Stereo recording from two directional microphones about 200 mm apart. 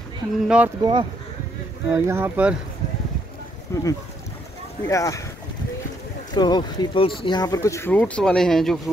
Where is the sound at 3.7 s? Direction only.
15° left (ahead or behind).